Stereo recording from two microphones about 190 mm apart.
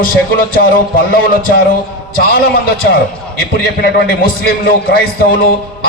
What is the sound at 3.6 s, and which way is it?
A man's voice, 55° left (ahead or behind).